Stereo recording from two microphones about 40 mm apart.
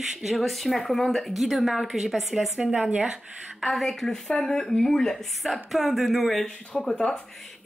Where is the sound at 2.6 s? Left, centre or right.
Right.